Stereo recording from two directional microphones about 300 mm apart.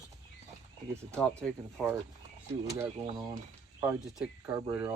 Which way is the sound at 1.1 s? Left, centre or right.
Centre.